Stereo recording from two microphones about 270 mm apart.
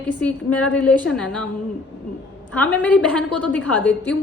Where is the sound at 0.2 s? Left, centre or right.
Centre.